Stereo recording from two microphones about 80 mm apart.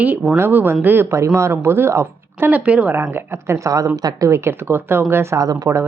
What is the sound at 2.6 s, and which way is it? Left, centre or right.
Speech, centre.